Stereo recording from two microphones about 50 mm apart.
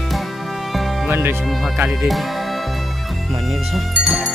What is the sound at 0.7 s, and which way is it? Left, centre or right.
Music, centre.